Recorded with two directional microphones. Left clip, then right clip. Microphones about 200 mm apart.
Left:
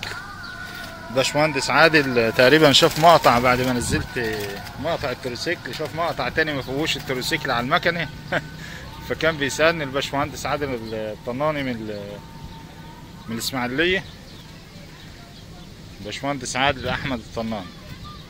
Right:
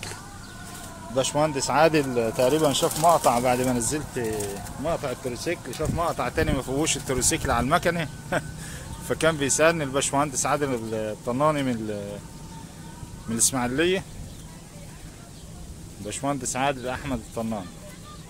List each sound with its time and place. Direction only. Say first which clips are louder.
1.1 s speech: left 4 dB; centre (ahead or behind)
2.1 s speech: left 7 dB; 10° left (ahead or behind)
3.0 s speech: left 3 dB; 25° left (ahead or behind)
3.4 s speech: left 4 dB; centre (ahead or behind); by 12.0 s 20° right (ahead or behind)
13.3 s speech: even; 15° right (ahead or behind)
16.1 s speech: left 2 dB; 10° right (ahead or behind)